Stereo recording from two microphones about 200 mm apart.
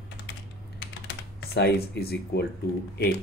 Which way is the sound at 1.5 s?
50° left (ahead or behind).